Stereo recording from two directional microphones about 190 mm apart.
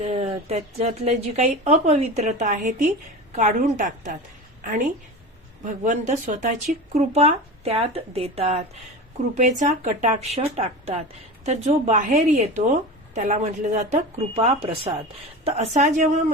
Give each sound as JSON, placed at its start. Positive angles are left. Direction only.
{"t": 0.0, "sound": "a woman's voice", "side_deg": -35}
{"t": 5.8, "sound": "a woman's voice", "side_deg": -40}